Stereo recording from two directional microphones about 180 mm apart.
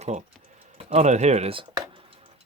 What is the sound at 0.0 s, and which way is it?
Speech, 40° right (ahead or behind).